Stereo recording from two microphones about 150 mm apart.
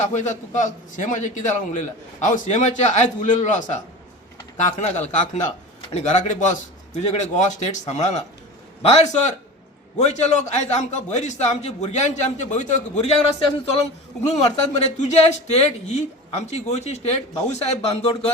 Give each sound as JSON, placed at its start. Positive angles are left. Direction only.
{"t": 0.1, "sound": "a man's voice", "side_deg": 55}
{"t": 14.3, "sound": "a man's voice", "side_deg": 50}